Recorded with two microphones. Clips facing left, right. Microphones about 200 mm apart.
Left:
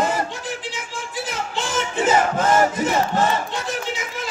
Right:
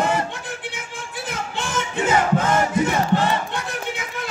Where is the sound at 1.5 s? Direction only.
60° right (ahead or behind).